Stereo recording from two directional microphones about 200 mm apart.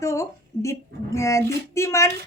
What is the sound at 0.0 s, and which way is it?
A woman's voice, 15° left (ahead or behind).